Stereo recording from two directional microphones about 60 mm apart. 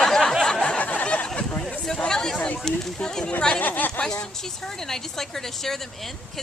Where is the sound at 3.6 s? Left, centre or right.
Left.